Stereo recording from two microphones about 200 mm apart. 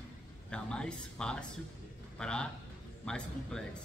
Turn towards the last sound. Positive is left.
turn(degrees=5)  # may be behind; listen again after turning